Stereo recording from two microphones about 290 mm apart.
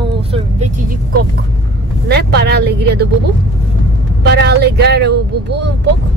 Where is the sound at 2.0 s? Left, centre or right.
Right.